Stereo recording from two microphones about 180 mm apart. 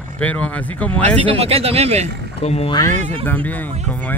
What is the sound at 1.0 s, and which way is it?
Speech, 35° right (ahead or behind).